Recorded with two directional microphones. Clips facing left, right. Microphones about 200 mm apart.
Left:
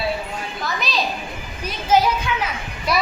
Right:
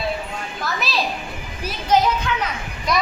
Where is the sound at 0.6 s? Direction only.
Centre (ahead or behind).